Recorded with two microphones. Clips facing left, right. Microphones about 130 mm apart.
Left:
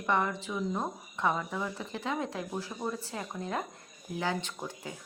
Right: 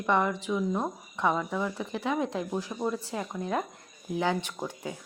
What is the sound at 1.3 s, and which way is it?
Speech, centre (ahead or behind).